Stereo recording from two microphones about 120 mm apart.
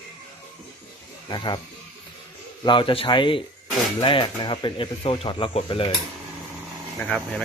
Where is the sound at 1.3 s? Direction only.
40° left (ahead or behind).